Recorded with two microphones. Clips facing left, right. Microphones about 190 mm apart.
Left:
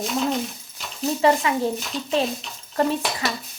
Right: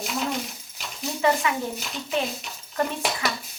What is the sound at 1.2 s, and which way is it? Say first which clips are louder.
A woman's voice: left 3 dB; 30° left (ahead or behind).